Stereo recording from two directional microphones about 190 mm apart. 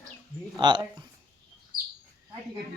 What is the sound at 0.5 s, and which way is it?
Speech, 25° right (ahead or behind).